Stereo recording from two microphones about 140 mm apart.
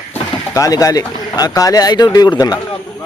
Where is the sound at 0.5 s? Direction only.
25° left (ahead or behind).